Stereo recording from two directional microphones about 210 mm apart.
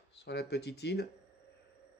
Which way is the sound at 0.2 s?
50° left (ahead or behind).